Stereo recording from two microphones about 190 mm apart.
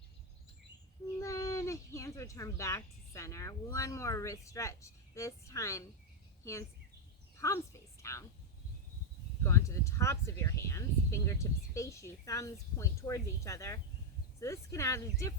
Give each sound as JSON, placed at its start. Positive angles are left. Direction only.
{"t": 1.2, "sound": "a woman's voice", "side_deg": 15}
{"t": 9.4, "sound": "speech", "side_deg": 15}